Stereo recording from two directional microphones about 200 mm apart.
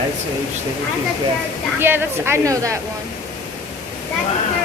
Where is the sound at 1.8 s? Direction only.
10° right (ahead or behind).